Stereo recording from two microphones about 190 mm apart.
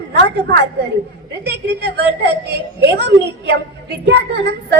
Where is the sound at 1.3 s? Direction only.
60° right (ahead or behind).